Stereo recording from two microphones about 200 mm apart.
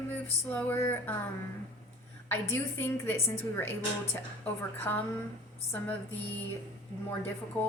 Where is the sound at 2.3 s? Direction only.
10° left (ahead or behind).